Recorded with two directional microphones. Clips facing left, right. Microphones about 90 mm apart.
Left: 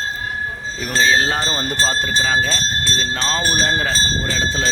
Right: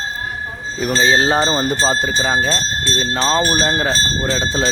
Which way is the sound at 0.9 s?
25° right (ahead or behind).